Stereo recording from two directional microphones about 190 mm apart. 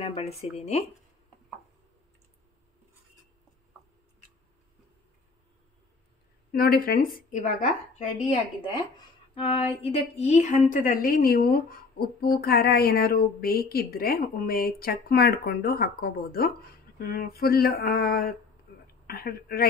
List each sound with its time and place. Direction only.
0.0 s speech: 35° left (ahead or behind)
6.5 s a woman's voice: 50° left (ahead or behind)
9.3 s a woman's voice: 30° left (ahead or behind); by 19.7 s 55° left (ahead or behind)